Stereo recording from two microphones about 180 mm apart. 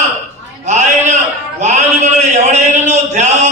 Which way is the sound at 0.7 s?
40° right (ahead or behind).